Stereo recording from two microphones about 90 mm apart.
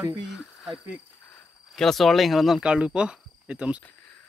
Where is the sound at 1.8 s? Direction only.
5° left (ahead or behind); by 3.8 s 15° right (ahead or behind).